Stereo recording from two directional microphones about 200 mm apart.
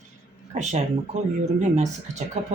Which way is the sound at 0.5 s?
35° right (ahead or behind).